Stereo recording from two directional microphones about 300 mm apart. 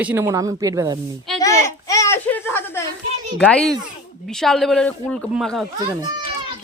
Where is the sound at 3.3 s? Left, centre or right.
Centre.